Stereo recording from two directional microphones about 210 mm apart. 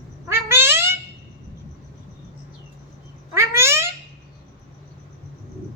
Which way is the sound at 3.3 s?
10° right (ahead or behind).